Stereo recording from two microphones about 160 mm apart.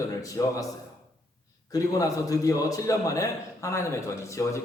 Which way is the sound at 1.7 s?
20° left (ahead or behind).